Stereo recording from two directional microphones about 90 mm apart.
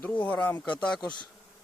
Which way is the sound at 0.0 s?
15° left (ahead or behind).